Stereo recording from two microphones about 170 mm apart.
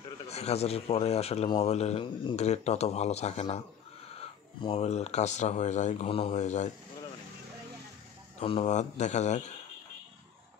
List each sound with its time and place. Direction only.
0.3 s speech: 40° left (ahead or behind)
8.4 s speech: 35° left (ahead or behind)